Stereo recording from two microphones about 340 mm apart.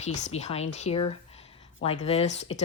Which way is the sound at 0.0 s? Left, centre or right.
Centre.